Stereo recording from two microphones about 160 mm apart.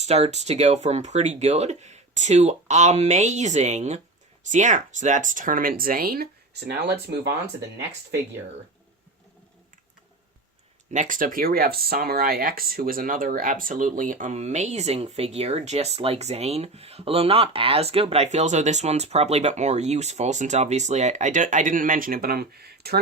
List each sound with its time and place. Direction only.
0.0 s speech: 45° right (ahead or behind); by 7.0 s 90° right
10.9 s speech: 55° right (ahead or behind); by 23.0 s 80° right